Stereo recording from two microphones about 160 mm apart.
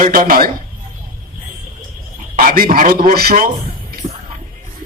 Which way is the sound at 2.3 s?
60° right (ahead or behind).